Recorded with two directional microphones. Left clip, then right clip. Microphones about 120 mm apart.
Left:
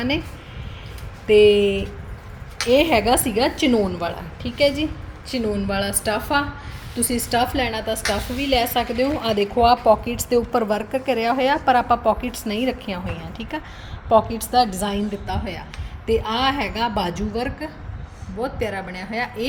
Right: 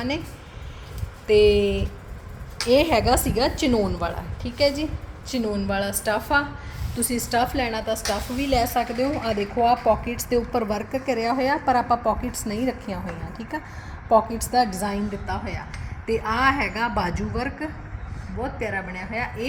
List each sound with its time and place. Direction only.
1.3 s a woman's voice: 20° left (ahead or behind); by 14.8 s 5° left (ahead or behind)
14.8 s a woman's voice: 30° left (ahead or behind)
15.3 s a woman's voice: 15° left (ahead or behind)